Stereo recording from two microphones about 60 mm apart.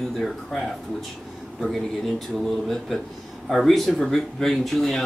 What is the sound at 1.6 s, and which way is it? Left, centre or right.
Speech, centre.